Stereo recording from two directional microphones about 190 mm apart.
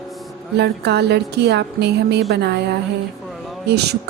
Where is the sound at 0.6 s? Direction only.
60° right (ahead or behind).